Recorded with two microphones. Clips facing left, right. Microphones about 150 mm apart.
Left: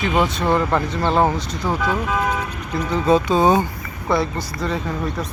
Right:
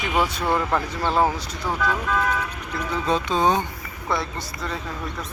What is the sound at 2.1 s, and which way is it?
Speech, 15° left (ahead or behind).